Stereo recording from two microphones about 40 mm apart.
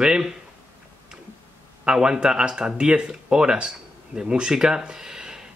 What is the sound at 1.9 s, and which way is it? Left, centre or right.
Speech, centre.